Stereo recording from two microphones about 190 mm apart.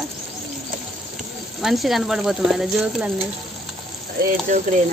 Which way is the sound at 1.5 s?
Centre (ahead or behind).